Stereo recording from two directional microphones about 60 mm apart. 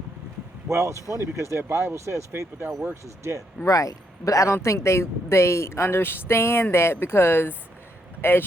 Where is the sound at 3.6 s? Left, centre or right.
Left.